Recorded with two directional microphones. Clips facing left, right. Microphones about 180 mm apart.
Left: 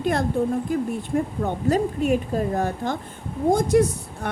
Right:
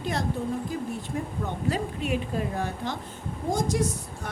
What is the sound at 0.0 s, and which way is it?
Speech, 55° left (ahead or behind).